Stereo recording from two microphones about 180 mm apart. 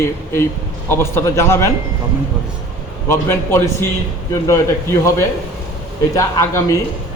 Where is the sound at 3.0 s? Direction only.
15° left (ahead or behind).